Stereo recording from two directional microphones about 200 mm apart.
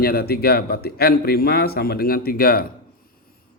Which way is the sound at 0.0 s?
50° left (ahead or behind).